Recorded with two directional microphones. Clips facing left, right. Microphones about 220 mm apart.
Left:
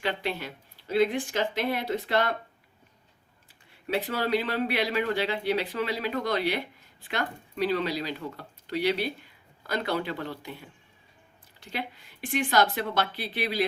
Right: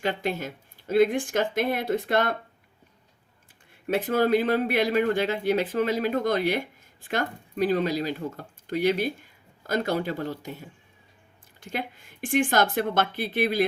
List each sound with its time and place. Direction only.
0.0 s speech: 45° right (ahead or behind)
3.8 s speech: 50° right (ahead or behind)